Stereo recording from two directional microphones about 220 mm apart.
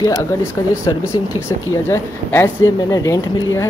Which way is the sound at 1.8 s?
10° left (ahead or behind).